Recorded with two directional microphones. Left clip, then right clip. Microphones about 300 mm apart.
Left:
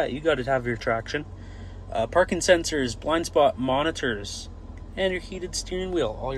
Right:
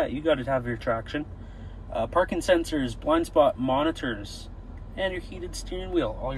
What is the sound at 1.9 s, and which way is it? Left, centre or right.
Speech, centre.